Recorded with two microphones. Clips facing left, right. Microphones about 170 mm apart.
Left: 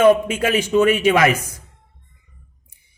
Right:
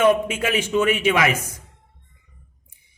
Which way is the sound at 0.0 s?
40° left (ahead or behind).